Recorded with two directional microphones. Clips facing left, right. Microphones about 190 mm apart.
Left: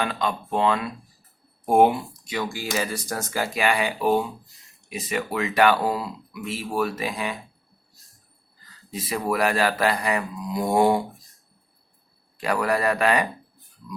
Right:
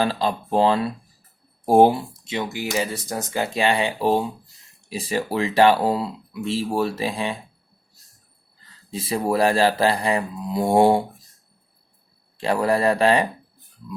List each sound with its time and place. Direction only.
0.0 s speech: 30° right (ahead or behind)
8.6 s speech: 30° right (ahead or behind)
12.4 s speech: 30° right (ahead or behind)